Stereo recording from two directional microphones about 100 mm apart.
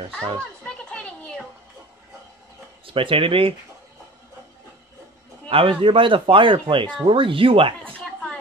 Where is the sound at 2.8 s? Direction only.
60° right (ahead or behind).